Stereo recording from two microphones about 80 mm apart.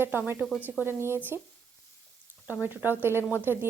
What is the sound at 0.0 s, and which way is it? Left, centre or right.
Speech, right.